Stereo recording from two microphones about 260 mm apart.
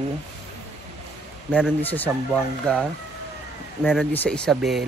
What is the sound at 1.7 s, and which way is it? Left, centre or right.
A man's voice, centre.